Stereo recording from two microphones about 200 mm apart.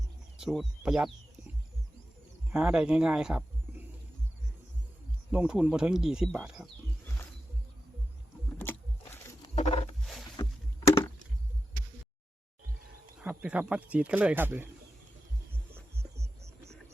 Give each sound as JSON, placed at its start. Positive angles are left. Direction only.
{"t": 0.3, "sound": "speech", "side_deg": 0}
{"t": 2.5, "sound": "speech", "side_deg": -5}
{"t": 5.3, "sound": "speech", "side_deg": -5}
{"t": 9.6, "sound": "roaring cats", "side_deg": 35}
{"t": 10.0, "sound": "roaring cats", "side_deg": 0}
{"t": 13.1, "sound": "speech", "side_deg": -5}